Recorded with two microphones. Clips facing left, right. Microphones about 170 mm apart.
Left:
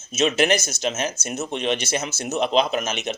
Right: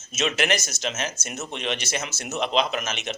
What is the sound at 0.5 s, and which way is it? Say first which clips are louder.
Speech: left 4 dB; 55° left (ahead or behind).